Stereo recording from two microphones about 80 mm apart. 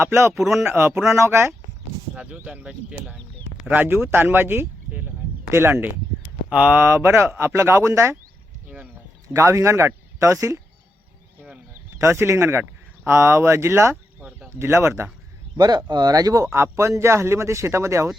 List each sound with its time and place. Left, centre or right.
0.0 s speech: right
0.3 s speech: centre
0.7 s speech: right
2.1 s speech: centre
6.5 s speech: centre
6.8 s speech: right
8.6 s a sound: right
9.3 s speech: right
11.9 s speech: right
14.3 s a sound: right
14.5 s speech: right
15.5 s speech: right